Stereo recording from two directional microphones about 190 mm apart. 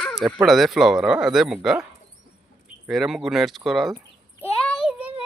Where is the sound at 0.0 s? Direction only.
Centre (ahead or behind).